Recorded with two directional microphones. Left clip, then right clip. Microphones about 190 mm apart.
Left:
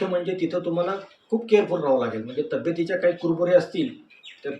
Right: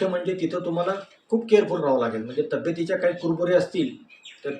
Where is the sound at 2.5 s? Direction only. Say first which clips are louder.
Left 3 dB; 5° right (ahead or behind).